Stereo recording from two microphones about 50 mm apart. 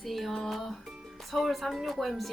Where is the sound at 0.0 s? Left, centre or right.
Centre.